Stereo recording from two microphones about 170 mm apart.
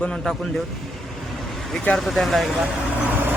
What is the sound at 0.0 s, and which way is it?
Speech, 5° left (ahead or behind).